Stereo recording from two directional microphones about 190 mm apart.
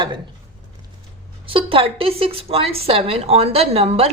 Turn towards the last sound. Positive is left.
turn(degrees=-30)  # may be behind; listen again after turning